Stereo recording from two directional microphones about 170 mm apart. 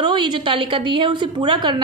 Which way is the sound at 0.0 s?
30° right (ahead or behind).